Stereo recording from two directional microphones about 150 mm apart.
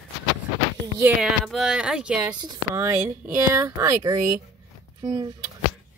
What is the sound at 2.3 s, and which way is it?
Speech, 30° right (ahead or behind).